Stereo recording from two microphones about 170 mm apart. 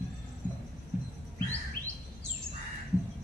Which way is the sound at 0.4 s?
50° left (ahead or behind).